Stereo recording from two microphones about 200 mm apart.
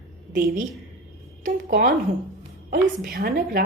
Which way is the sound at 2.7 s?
45° right (ahead or behind).